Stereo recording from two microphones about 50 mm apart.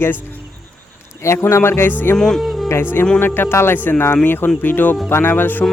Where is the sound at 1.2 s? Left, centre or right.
Left.